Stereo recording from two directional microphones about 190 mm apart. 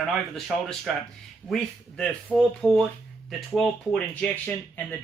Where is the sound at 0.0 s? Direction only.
Centre (ahead or behind).